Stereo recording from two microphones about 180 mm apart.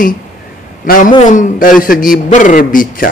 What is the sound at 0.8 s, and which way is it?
A man's voice, 50° left (ahead or behind).